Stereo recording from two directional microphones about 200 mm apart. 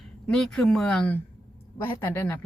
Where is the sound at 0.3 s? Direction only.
Centre (ahead or behind).